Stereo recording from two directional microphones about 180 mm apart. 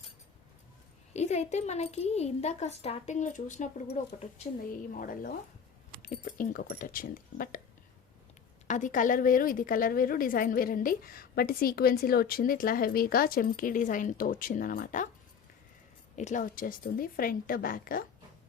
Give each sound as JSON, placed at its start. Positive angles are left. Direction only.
{"t": 1.1, "sound": "a woman's voice", "side_deg": 40}
{"t": 8.6, "sound": "a woman's voice", "side_deg": 45}
{"t": 16.1, "sound": "a woman's voice", "side_deg": 45}